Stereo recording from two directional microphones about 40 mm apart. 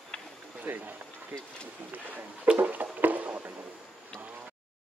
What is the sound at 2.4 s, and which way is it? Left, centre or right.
Music, right.